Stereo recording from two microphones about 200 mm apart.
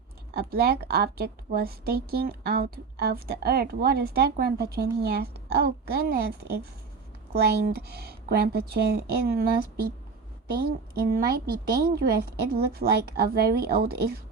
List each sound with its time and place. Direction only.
0.3 s a woman's voice: 50° right (ahead or behind)
11.3 s a woman's voice: 50° right (ahead or behind)